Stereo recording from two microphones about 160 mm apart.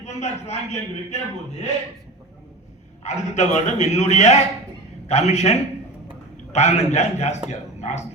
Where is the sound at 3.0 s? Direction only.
45° left (ahead or behind).